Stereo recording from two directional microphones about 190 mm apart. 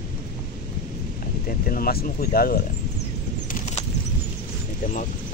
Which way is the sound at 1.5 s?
50° left (ahead or behind).